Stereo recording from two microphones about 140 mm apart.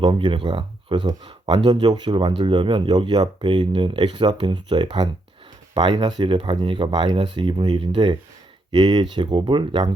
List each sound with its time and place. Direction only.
0.0 s speech: 35° right (ahead or behind)